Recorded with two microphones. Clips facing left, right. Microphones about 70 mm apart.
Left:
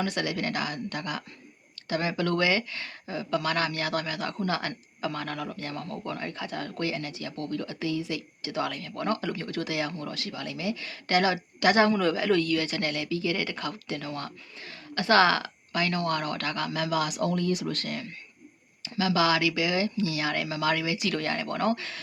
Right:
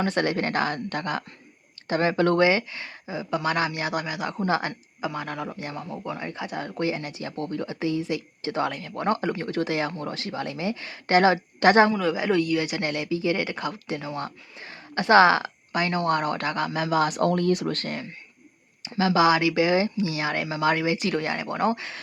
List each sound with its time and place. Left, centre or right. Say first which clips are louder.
0.0 s speech: right 5 dB; right
12.1 s speech: right 2 dB; centre
17.1 s speech: right 5 dB; right